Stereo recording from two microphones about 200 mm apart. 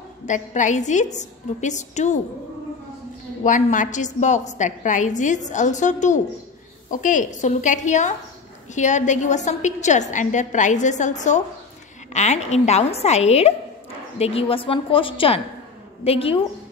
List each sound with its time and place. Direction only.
0.3 s a woman's voice: 40° left (ahead or behind)
3.4 s a woman's voice: 40° left (ahead or behind)